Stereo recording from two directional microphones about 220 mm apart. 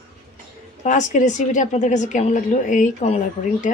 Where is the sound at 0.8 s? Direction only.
35° left (ahead or behind).